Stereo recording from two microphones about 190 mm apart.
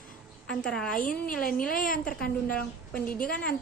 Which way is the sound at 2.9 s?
5° left (ahead or behind).